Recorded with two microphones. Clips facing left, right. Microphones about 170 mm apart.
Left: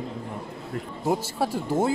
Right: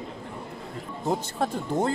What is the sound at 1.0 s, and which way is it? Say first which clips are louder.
Speech: left 2 dB; 10° left (ahead or behind).